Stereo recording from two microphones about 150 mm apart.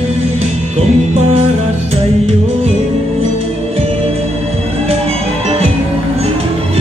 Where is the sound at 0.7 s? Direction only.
40° right (ahead or behind).